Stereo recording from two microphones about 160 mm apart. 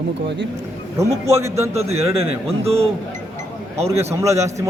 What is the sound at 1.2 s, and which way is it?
Speech, 15° right (ahead or behind).